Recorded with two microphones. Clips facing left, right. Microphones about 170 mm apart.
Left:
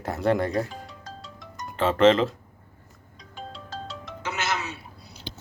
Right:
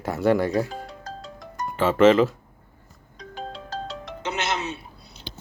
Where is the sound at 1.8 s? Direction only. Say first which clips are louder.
Right 2 dB; 5° right (ahead or behind).